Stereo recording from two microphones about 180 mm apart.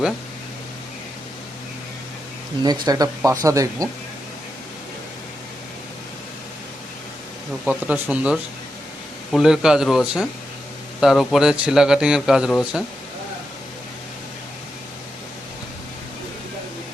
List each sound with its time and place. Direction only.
2.6 s speech: 20° right (ahead or behind)
7.6 s a man's voice: 5° right (ahead or behind)